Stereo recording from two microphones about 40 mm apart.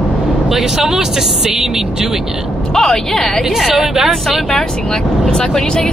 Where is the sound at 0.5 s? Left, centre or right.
Centre.